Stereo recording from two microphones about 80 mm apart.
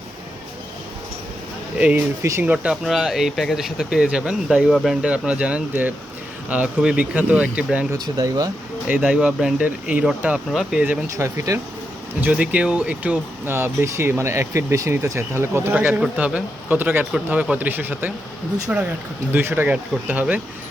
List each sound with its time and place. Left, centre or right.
1.8 s a man's voice: centre
2.8 s speech: centre
7.9 s speech: right
9.0 s speech: centre
11.2 s speech: right
12.2 s speech: centre
13.4 s speech: right
15.7 s a man's voice: centre